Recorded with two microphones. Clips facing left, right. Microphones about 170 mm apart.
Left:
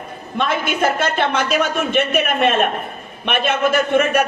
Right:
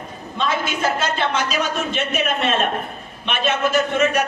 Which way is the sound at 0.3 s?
55° left (ahead or behind).